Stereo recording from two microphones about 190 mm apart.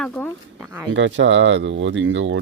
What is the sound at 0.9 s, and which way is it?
A man's voice, 75° right (ahead or behind).